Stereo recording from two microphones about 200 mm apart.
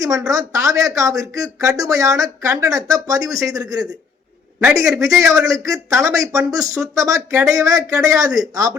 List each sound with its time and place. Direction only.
0.0 s speech: 15° right (ahead or behind)